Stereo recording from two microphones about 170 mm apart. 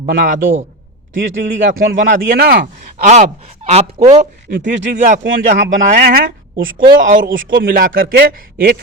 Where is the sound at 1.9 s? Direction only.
70° right (ahead or behind).